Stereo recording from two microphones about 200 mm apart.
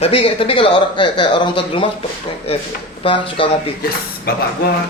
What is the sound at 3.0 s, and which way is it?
Speech, 25° left (ahead or behind).